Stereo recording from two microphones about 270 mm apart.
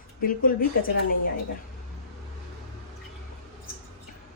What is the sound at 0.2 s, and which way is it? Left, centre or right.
Speech, left.